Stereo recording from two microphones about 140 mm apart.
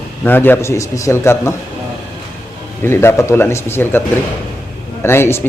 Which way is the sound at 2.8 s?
15° left (ahead or behind).